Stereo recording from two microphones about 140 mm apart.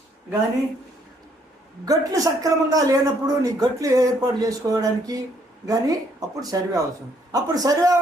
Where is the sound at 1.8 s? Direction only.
25° right (ahead or behind).